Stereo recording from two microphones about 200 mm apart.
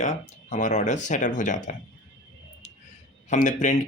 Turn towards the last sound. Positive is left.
turn(degrees=40)  # may be behind; listen again after turning